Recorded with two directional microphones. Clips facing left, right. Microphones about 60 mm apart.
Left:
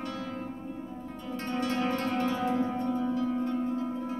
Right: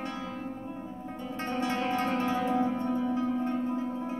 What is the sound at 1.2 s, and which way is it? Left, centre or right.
Music, right.